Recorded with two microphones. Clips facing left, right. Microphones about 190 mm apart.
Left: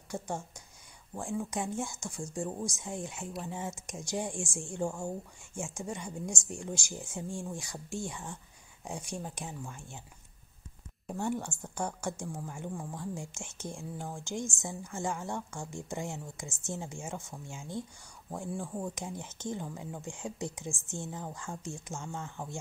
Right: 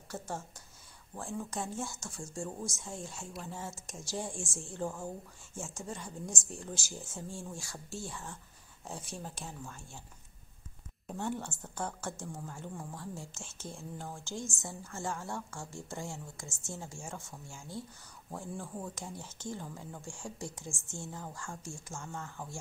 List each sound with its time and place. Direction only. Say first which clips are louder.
0.1 s speech: left 3 dB; 15° left (ahead or behind)
11.1 s speech: left 3 dB; 10° left (ahead or behind)